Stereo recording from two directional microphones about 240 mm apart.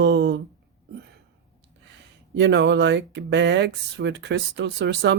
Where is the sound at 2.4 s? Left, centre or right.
Right.